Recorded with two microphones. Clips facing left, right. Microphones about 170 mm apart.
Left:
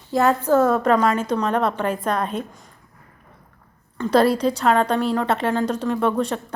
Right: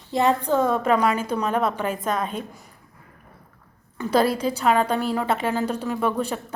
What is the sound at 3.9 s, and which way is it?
A woman's voice, 5° right (ahead or behind).